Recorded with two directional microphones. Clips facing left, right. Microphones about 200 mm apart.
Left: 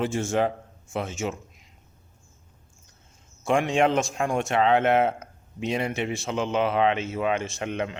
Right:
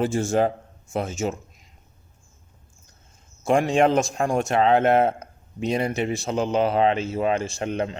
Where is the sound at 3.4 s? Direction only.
40° right (ahead or behind).